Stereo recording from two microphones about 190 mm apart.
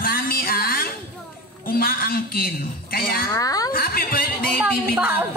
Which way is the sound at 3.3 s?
20° left (ahead or behind).